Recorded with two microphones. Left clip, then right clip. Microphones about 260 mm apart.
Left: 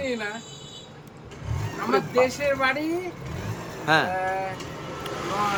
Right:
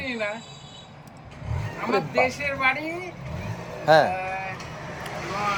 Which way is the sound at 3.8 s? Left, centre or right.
Left.